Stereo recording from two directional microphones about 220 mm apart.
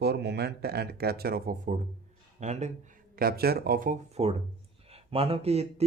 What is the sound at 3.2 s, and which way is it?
A man's voice, 45° right (ahead or behind).